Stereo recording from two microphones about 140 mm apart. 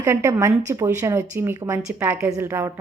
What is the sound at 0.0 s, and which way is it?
A woman's voice, 20° right (ahead or behind).